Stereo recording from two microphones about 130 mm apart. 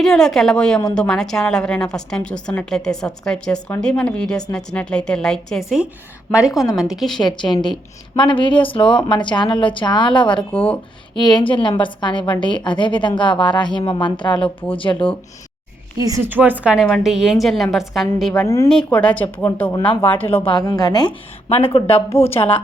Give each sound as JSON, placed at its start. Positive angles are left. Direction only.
{"t": 0.0, "sound": "a woman's voice", "side_deg": 5}
{"t": 7.2, "sound": "a woman's voice", "side_deg": 35}
{"t": 16.0, "sound": "a woman's voice", "side_deg": -25}
{"t": 16.3, "sound": "a woman's voice", "side_deg": -15}
{"t": 16.8, "sound": "a woman's voice", "side_deg": 0}
{"t": 18.4, "sound": "speech", "side_deg": 20}
{"t": 18.7, "sound": "speech", "side_deg": 5}
{"t": 20.5, "sound": "a woman's voice", "side_deg": 30}
{"t": 21.5, "sound": "speech", "side_deg": 45}